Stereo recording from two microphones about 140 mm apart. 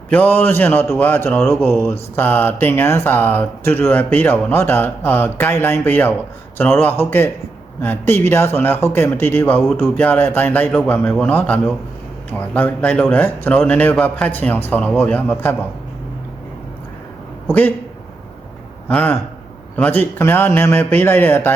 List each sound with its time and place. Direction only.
0.1 s a man's voice: 10° left (ahead or behind)
18.9 s a man's voice: 10° left (ahead or behind)